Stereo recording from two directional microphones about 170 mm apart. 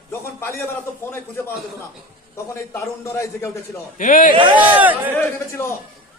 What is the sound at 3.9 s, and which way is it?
Speech, 50° left (ahead or behind).